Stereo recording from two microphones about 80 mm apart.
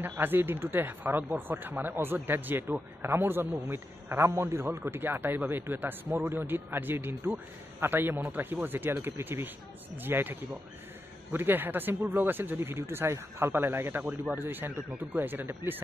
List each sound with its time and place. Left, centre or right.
0.2 s a man's voice: right